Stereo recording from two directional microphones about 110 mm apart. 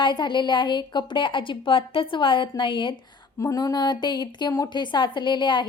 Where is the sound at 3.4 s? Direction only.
35° left (ahead or behind).